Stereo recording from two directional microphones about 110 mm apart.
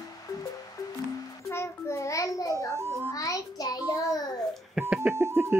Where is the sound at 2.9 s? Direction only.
25° left (ahead or behind).